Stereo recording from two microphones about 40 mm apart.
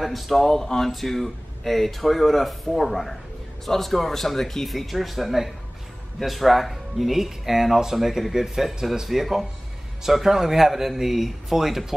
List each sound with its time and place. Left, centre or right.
0.0 s speech: centre
0.6 s a sound: centre
0.8 s speech: centre